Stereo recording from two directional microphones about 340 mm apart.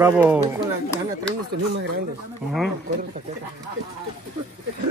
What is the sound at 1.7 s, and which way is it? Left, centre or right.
Speech, right.